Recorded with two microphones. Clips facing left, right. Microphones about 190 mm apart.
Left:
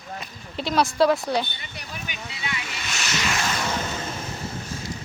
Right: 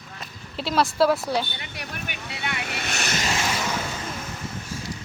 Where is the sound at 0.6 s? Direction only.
5° right (ahead or behind).